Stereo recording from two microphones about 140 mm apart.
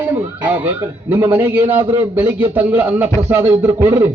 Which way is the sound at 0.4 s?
15° right (ahead or behind).